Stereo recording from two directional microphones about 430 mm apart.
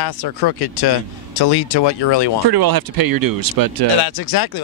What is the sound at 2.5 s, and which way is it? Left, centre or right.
Speech, right.